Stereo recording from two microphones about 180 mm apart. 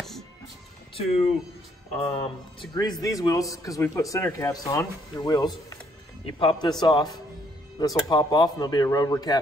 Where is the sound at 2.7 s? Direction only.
20° left (ahead or behind).